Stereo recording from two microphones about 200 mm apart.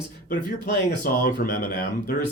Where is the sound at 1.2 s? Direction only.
50° left (ahead or behind).